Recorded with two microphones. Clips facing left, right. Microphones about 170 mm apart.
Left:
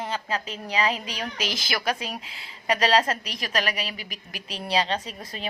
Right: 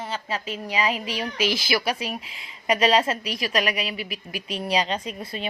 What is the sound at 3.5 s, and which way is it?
A woman's voice, 35° left (ahead or behind).